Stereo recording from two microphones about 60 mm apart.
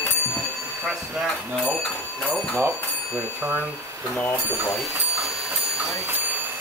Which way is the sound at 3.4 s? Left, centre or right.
Right.